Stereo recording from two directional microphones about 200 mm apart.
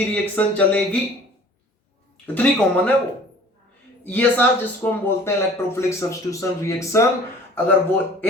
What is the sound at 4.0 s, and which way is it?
A man's voice, 10° left (ahead or behind).